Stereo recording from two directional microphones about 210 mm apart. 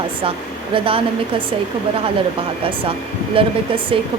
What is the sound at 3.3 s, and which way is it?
Speech, 25° right (ahead or behind).